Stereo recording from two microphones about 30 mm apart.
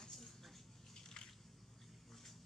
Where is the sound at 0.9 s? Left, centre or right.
Left.